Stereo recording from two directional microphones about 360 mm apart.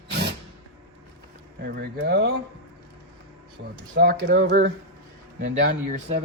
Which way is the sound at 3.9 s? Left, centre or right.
Right.